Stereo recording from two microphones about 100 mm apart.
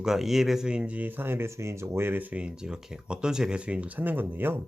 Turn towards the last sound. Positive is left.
turn(degrees=-20)  # may be behind; listen again after turning